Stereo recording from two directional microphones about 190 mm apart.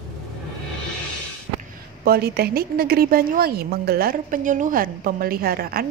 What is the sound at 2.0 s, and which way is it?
A woman's voice, 55° right (ahead or behind).